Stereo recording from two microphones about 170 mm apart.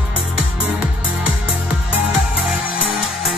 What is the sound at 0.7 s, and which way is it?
Music, 5° right (ahead or behind).